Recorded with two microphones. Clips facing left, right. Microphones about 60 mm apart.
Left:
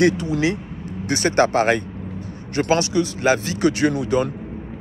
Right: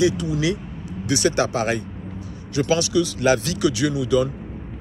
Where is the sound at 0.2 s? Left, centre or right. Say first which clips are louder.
Left 2 dB; left.